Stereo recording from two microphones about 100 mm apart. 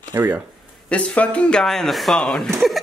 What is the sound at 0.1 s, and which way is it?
Speech, 20° right (ahead or behind).